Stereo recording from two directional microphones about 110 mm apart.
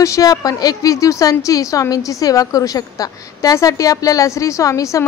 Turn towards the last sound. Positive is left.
turn(degrees=30)  # may be behind; listen again after turning